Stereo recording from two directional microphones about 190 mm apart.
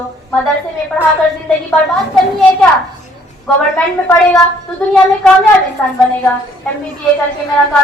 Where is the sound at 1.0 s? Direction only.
5° left (ahead or behind).